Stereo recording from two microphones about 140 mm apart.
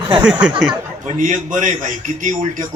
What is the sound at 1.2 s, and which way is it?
A man's voice, 65° right (ahead or behind).